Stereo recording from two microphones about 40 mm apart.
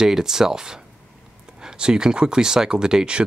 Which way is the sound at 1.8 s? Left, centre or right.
Centre.